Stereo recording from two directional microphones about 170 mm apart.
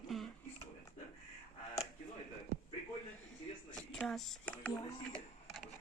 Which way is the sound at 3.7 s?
5° left (ahead or behind).